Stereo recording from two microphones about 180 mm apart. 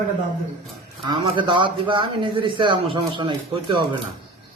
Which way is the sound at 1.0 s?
25° right (ahead or behind).